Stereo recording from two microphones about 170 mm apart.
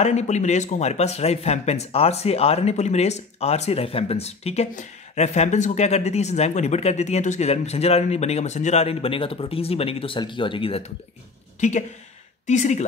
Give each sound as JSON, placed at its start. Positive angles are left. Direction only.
{"t": 0.0, "sound": "speech", "side_deg": 40}
{"t": 11.6, "sound": "speech", "side_deg": 45}